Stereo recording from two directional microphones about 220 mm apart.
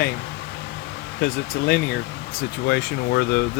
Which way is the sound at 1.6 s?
50° left (ahead or behind).